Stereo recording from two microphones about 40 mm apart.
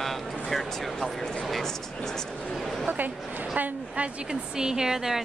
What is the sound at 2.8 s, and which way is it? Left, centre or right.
Speech, right.